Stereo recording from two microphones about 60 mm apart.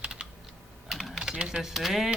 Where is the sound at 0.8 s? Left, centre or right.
Centre.